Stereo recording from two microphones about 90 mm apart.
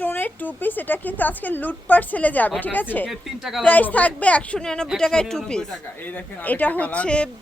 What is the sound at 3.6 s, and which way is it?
Speech, 15° left (ahead or behind).